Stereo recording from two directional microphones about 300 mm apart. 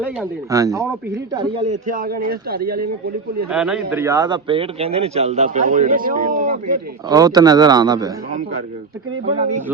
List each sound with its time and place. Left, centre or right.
0.2 s a man's voice: centre; by 2.9 s right
3.5 s a man's voice: centre; by 6.7 s right
7.1 s a man's voice: centre
8.3 s a man's voice: right